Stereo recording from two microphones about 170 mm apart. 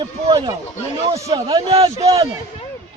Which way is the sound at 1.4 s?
35° right (ahead or behind).